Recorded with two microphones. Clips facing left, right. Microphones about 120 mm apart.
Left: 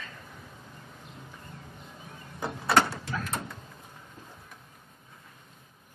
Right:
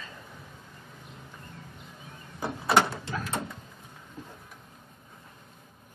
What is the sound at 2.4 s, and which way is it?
Door, centre (ahead or behind).